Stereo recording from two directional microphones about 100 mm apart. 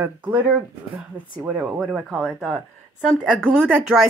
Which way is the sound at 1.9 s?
5° right (ahead or behind).